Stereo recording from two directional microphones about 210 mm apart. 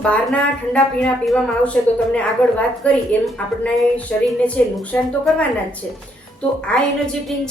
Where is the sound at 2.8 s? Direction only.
5° left (ahead or behind).